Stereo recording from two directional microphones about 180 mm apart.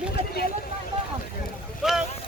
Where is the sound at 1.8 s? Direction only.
Centre (ahead or behind).